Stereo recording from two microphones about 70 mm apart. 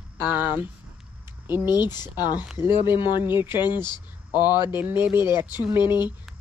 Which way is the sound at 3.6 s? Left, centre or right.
Left.